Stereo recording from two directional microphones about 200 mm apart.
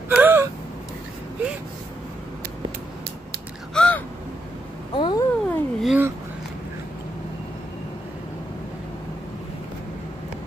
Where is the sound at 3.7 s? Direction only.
5° left (ahead or behind).